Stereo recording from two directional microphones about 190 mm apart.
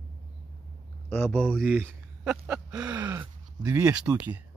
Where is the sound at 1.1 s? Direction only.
5° left (ahead or behind); by 3.3 s 20° right (ahead or behind).